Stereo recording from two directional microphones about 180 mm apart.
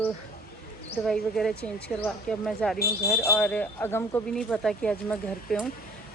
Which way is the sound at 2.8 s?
60° left (ahead or behind).